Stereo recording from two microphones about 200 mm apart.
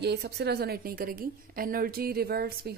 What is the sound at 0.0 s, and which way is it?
A woman's voice, 55° right (ahead or behind).